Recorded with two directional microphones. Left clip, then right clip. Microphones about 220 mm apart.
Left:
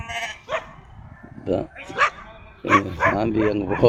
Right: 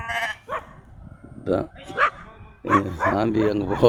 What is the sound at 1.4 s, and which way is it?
Bow-wow, 10° right (ahead or behind).